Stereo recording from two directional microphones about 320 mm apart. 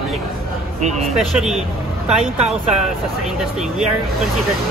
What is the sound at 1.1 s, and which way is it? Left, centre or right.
Speech, centre.